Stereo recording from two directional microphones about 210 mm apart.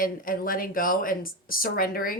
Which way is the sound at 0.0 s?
40° left (ahead or behind).